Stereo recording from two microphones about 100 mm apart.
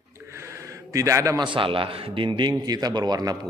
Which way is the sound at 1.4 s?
60° right (ahead or behind).